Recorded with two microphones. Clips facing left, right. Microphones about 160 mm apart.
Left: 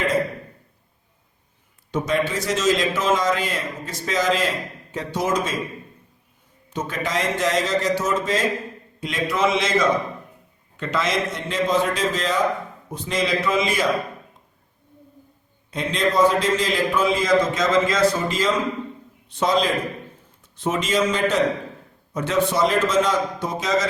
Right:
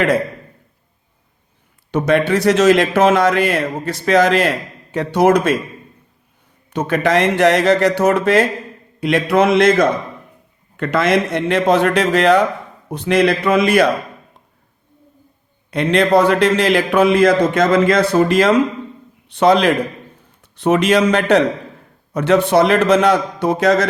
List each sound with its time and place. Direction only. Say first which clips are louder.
1.9 s a man's voice: right 8 dB; 65° right (ahead or behind)
6.7 s a man's voice: right 10 dB; 65° right (ahead or behind)
15.7 s a man's voice: right 8 dB; 70° right (ahead or behind)